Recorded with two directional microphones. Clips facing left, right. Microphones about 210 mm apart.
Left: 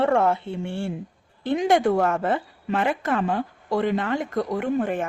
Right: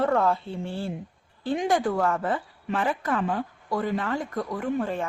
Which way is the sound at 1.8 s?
25° left (ahead or behind).